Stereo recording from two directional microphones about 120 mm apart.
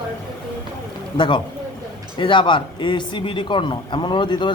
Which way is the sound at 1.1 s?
40° left (ahead or behind).